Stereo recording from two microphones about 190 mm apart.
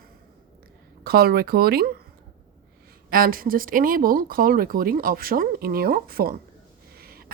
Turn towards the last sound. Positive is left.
turn(degrees=-55)  # may be behind; listen again after turning